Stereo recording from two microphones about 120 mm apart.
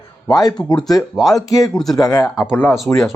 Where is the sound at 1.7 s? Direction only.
Centre (ahead or behind).